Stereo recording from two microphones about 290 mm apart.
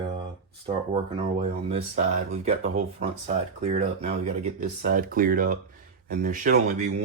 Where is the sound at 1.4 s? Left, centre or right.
Right.